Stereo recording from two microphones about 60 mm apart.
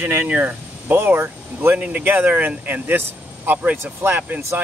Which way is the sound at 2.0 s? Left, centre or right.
Right.